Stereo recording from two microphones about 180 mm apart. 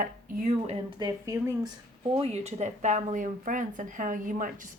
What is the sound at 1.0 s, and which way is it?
Speech, 20° right (ahead or behind).